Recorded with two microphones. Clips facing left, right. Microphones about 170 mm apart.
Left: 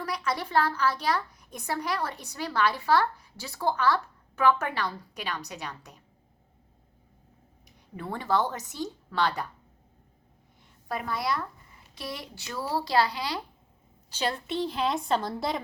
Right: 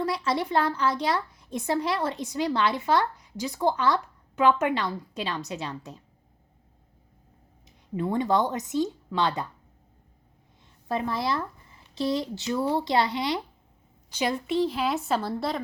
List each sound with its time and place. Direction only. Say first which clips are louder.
0.0 s a woman's voice: right 5 dB; 25° right (ahead or behind)
7.9 s a woman's voice: right 4 dB; 20° right (ahead or behind)
10.8 s a woman's voice: right 3 dB; 25° right (ahead or behind)
14.2 s a woman's voice: right 4 dB; 10° right (ahead or behind)